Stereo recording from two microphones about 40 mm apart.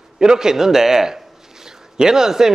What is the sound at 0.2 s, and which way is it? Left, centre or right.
Speech, centre.